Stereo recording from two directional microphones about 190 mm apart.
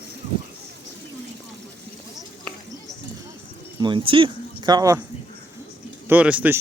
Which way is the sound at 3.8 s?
25° right (ahead or behind).